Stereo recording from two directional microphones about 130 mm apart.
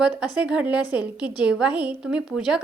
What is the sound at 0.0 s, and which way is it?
A woman's voice, 10° right (ahead or behind).